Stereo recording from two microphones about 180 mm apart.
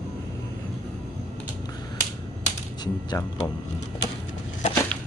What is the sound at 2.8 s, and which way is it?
Speech, 20° left (ahead or behind).